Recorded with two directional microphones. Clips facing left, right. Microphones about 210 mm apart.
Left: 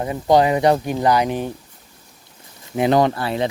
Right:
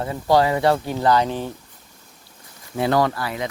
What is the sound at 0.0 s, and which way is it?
Speech, 20° left (ahead or behind).